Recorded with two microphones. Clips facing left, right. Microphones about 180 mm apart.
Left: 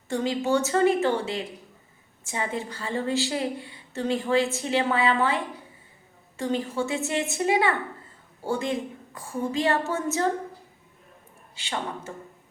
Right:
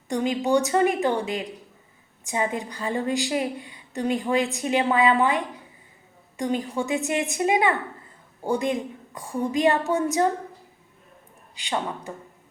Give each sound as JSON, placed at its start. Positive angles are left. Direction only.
{"t": 0.1, "sound": "a woman's voice", "side_deg": -15}
{"t": 11.5, "sound": "a woman's voice", "side_deg": -15}